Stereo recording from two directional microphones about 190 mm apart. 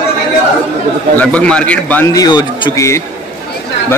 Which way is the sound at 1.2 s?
5° left (ahead or behind).